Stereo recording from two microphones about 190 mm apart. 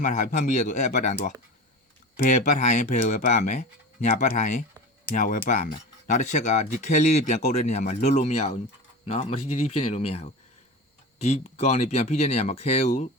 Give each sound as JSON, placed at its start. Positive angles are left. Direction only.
{"t": 0.0, "sound": "speech", "side_deg": 40}
{"t": 2.1, "sound": "speech", "side_deg": 40}